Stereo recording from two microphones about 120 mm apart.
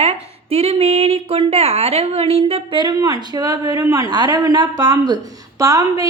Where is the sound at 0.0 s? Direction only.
60° right (ahead or behind).